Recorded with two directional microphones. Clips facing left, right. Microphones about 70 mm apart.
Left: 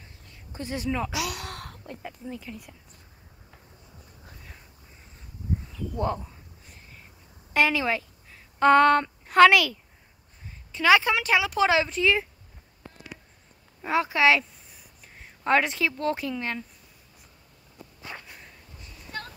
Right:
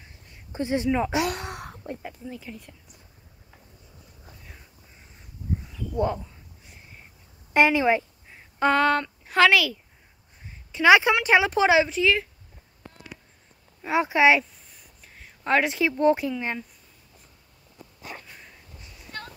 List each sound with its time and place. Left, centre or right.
0.5 s speech: right
1.5 s a sound: centre
2.0 s speech: centre
7.5 s a woman's voice: right
8.5 s speech: centre
10.7 s speech: centre
11.2 s speech: right
11.7 s speech: centre
12.0 s speech: centre
13.8 s speech: centre
14.7 s a sound: centre
15.4 s speech: centre
18.2 s sniff: centre